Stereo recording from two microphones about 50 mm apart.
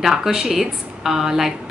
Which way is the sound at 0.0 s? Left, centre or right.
Centre.